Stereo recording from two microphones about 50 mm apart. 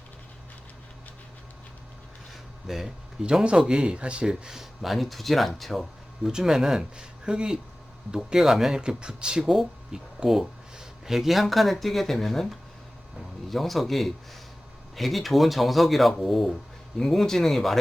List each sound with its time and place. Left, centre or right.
2.6 s speech: centre
3.2 s speech: centre
6.3 s speech: centre
8.8 s speech: centre